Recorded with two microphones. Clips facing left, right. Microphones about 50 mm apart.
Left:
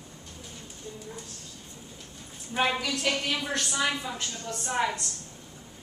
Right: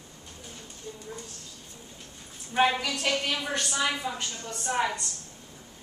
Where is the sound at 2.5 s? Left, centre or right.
Centre.